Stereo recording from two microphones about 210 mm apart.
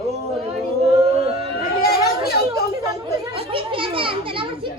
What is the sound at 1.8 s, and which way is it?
Chatter, 45° left (ahead or behind).